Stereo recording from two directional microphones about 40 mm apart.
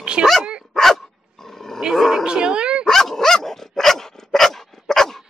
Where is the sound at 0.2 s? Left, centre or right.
Centre.